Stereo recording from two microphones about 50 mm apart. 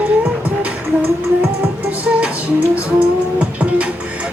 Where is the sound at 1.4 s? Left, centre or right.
Right.